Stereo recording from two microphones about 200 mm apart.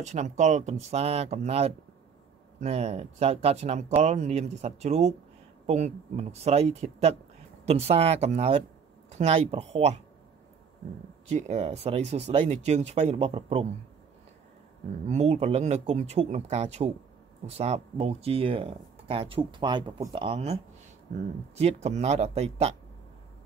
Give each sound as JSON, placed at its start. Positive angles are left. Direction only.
{"t": 0.0, "sound": "speech", "side_deg": -35}
{"t": 11.3, "sound": "speech", "side_deg": -30}
{"t": 15.0, "sound": "speech", "side_deg": -35}
{"t": 21.5, "sound": "speech", "side_deg": -35}